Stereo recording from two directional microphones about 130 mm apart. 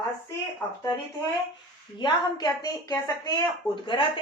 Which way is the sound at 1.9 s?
35° left (ahead or behind).